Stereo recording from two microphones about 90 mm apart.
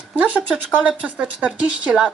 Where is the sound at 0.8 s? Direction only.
15° right (ahead or behind).